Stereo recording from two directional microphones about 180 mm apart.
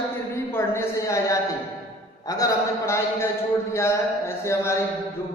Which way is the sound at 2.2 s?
20° left (ahead or behind).